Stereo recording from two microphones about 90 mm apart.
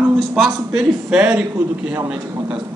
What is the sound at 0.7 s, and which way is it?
Speech, 10° right (ahead or behind).